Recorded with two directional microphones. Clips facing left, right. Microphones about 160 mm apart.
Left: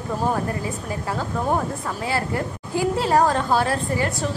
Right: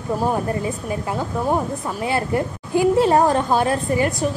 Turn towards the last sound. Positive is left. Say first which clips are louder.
# right 3 dB
turn(degrees=-20)  # may be behind; listen again after turning